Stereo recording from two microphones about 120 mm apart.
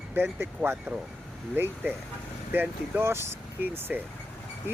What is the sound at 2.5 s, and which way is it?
Speech, 15° right (ahead or behind).